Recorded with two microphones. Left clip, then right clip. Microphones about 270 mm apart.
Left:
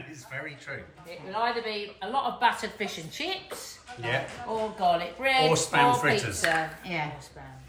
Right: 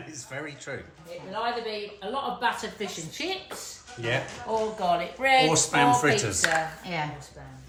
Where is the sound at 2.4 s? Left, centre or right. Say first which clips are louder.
Left 2 dB; centre.